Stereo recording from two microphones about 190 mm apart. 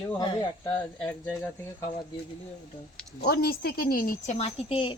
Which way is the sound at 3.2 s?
55° left (ahead or behind).